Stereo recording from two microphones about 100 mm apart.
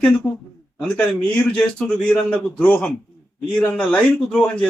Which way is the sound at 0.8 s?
10° left (ahead or behind).